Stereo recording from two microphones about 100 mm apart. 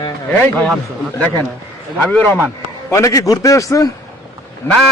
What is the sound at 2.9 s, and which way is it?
Speech, 35° left (ahead or behind).